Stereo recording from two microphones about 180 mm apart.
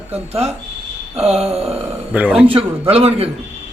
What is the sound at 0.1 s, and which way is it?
Speech, 35° right (ahead or behind).